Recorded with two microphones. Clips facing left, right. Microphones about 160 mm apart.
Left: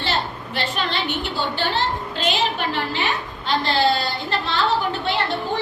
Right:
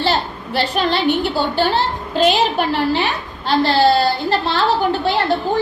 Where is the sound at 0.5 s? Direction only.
40° right (ahead or behind).